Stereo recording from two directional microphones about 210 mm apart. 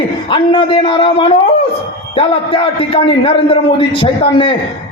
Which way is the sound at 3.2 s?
25° left (ahead or behind).